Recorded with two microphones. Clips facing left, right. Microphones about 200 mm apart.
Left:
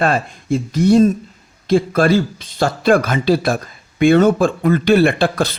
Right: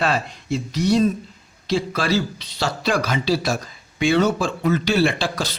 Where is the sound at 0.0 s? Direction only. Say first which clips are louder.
Left 5 dB; 50° left (ahead or behind).